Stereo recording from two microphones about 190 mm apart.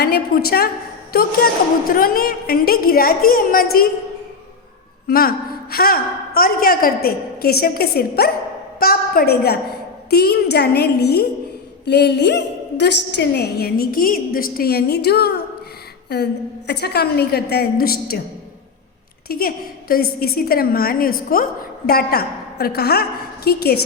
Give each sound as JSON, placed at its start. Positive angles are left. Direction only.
{"t": 0.0, "sound": "a woman's voice", "side_deg": 55}
{"t": 5.0, "sound": "a woman's voice", "side_deg": 50}
{"t": 19.3, "sound": "a woman's voice", "side_deg": 50}